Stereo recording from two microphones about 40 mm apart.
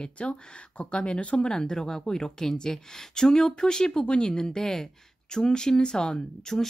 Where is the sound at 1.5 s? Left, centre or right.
Centre.